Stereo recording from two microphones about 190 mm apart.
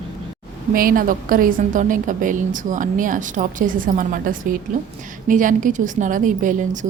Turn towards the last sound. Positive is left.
turn(degrees=-45)  # may be behind; listen again after turning